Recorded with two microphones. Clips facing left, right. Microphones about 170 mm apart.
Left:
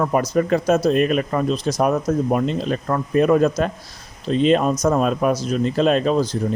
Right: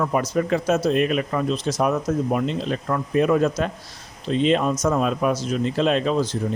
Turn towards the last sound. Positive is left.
turn(degrees=45)  # may be behind; listen again after turning